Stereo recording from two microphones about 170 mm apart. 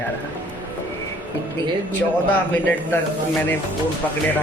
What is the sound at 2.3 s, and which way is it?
Speech, 10° left (ahead or behind).